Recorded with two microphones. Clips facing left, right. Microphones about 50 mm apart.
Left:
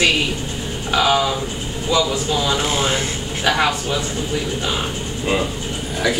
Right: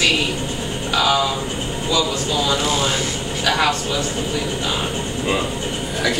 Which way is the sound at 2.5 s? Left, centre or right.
Left.